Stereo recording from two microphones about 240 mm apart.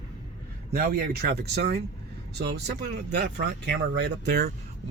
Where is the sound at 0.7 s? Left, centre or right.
Right.